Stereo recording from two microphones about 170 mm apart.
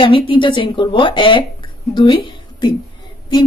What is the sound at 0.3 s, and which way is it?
A woman's voice, 30° left (ahead or behind).